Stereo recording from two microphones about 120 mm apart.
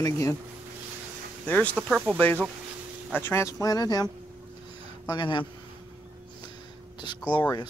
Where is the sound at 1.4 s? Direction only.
10° left (ahead or behind).